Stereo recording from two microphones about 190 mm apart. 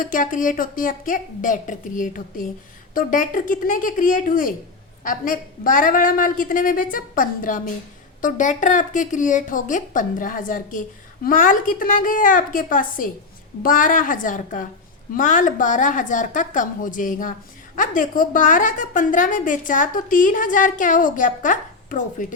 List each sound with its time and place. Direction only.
0.0 s speech: 45° left (ahead or behind)